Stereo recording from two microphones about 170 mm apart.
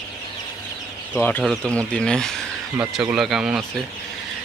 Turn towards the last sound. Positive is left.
turn(degrees=-5)  # may be behind; listen again after turning